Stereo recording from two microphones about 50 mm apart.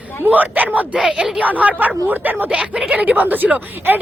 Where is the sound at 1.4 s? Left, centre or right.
Right.